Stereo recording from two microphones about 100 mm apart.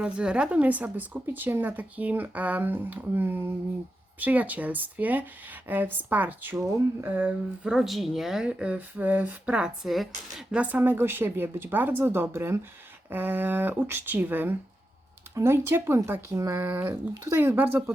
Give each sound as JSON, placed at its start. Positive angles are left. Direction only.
{"t": 0.0, "sound": "speech", "side_deg": -10}
{"t": 10.6, "sound": "speech", "side_deg": -15}